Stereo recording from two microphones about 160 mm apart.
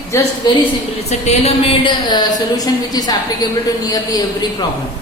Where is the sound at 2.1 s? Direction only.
25° left (ahead or behind).